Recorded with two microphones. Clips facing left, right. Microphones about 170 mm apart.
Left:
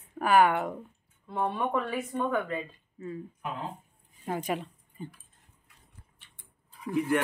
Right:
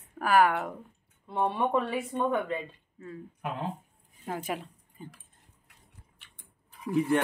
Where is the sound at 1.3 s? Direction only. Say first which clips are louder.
Right 2 dB; 25° right (ahead or behind).